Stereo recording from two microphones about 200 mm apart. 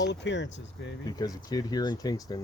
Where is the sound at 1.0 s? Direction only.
20° left (ahead or behind).